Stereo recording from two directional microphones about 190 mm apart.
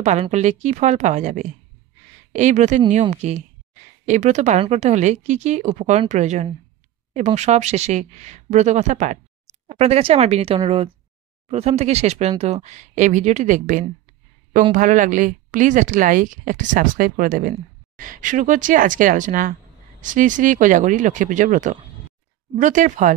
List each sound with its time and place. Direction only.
0.0 s a woman's voice: 35° right (ahead or behind)